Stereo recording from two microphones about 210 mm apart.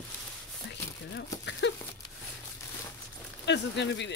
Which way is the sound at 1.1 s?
55° left (ahead or behind).